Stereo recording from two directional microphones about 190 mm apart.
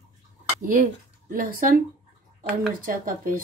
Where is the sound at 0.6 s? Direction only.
45° right (ahead or behind).